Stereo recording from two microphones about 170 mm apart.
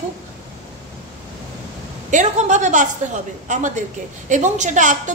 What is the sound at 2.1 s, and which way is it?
A woman's voice, 45° right (ahead or behind).